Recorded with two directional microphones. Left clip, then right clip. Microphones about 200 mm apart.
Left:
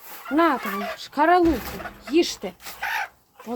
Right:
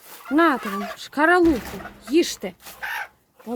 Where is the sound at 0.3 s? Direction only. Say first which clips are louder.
Right 1 dB; 30° right (ahead or behind).